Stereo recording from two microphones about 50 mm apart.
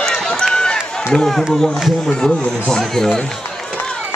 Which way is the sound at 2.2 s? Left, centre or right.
Centre.